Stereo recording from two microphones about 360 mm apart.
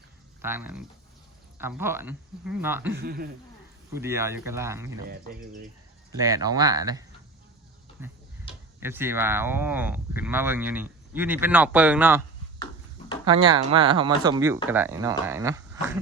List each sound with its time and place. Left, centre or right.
0.4 s speech: centre
2.9 s speech: right
3.9 s speech: centre
6.1 s speech: centre
13.2 s speech: centre